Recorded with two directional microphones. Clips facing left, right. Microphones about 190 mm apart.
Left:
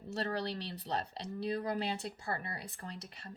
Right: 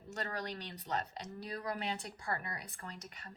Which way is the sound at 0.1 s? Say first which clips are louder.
Left 5 dB; 30° left (ahead or behind).